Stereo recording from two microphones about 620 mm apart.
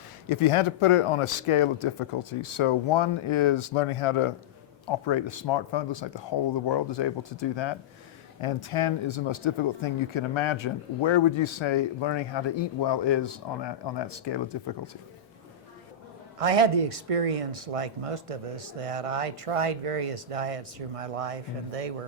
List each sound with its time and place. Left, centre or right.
0.3 s speech: left
16.4 s speech: right